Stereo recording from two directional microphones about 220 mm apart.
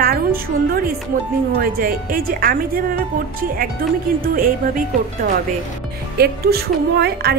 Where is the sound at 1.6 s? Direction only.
40° right (ahead or behind).